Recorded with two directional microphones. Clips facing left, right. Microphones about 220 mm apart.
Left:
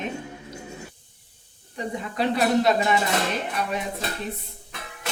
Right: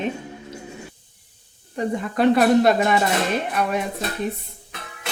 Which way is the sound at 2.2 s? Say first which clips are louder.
Right 6 dB; 55° right (ahead or behind).